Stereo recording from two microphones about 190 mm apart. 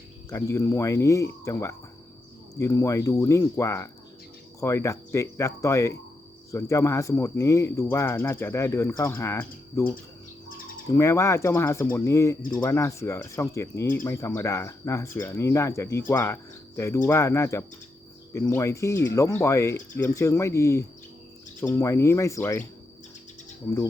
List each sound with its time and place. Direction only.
0.3 s speech: 15° left (ahead or behind)